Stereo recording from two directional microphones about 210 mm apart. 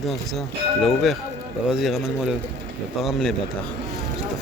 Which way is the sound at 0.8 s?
Centre (ahead or behind).